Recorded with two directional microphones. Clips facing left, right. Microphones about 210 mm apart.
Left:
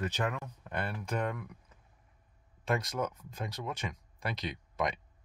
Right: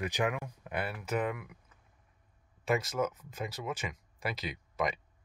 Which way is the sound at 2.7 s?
5° right (ahead or behind).